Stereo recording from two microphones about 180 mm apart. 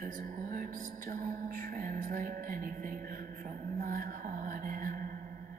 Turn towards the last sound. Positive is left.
turn(degrees=-50)  # may be behind; listen again after turning